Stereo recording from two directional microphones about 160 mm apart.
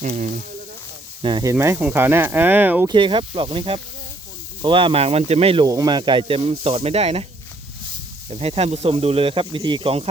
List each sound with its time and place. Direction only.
0.0 s speech: 50° right (ahead or behind)
1.2 s speech: 25° right (ahead or behind)
1.5 s speech: 15° right (ahead or behind)
2.8 s speech: 30° right (ahead or behind)
5.6 s speech: 25° right (ahead or behind); by 7.3 s 40° right (ahead or behind)
8.3 s speech: 40° right (ahead or behind)